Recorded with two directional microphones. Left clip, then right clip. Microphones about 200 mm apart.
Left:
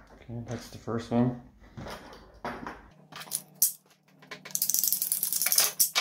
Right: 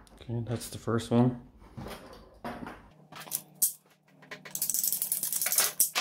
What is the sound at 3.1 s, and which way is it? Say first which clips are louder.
Scissors: left 2 dB; 5° right (ahead or behind).